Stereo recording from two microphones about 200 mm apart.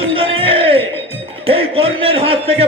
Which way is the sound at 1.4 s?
30° right (ahead or behind).